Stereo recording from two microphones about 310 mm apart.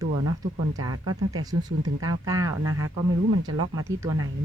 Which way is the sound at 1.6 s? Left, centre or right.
Centre.